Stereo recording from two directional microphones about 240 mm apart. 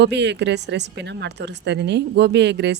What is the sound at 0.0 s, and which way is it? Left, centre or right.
A woman's voice, right.